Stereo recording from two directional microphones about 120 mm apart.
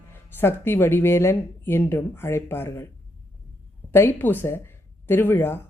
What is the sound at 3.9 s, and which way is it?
A woman's voice, 20° left (ahead or behind).